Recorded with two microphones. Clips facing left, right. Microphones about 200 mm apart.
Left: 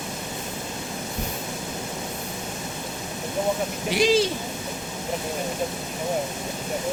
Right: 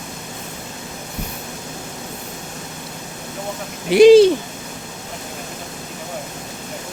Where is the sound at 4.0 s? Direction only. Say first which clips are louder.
Right 13 dB; 60° right (ahead or behind).